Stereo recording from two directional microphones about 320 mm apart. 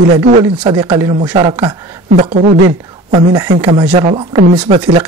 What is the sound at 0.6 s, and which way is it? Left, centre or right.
Speech, centre.